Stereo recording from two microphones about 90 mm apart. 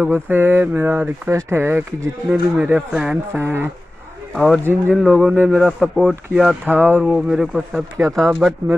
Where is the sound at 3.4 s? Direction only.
25° right (ahead or behind).